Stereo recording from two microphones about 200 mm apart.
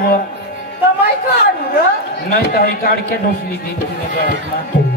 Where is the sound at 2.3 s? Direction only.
50° left (ahead or behind).